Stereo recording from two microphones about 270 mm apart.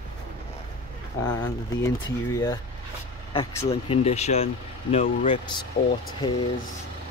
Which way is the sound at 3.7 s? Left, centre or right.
Left.